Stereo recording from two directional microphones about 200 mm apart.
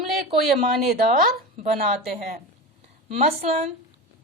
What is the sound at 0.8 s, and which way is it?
A woman's voice, 45° right (ahead or behind).